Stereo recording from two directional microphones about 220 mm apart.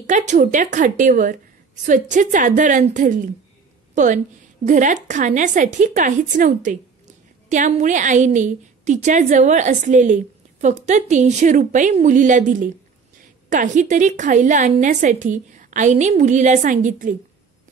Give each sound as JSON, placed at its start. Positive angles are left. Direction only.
{"t": 0.0, "sound": "a woman's voice", "side_deg": -35}